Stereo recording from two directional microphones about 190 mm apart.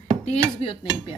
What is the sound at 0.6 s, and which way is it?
Speech, 30° left (ahead or behind).